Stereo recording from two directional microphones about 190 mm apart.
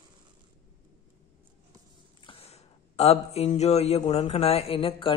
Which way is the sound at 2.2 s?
30° left (ahead or behind).